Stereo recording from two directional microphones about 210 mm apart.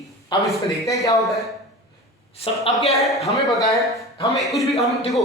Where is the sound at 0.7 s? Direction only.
Centre (ahead or behind).